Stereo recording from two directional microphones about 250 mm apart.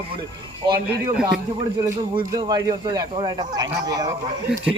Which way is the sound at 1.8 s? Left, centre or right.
Centre.